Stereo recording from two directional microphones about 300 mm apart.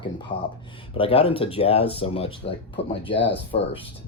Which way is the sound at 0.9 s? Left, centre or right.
Centre.